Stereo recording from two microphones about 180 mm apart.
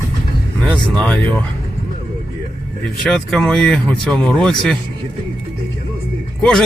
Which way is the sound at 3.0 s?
5° left (ahead or behind).